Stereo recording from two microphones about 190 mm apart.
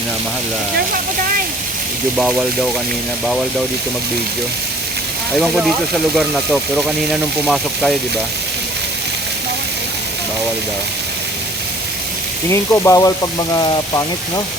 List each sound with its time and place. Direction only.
5.4 s speech: centre (ahead or behind)
12.5 s speech: 15° left (ahead or behind)